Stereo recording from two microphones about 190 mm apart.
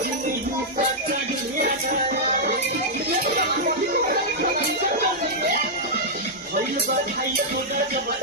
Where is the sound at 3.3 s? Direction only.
50° right (ahead or behind).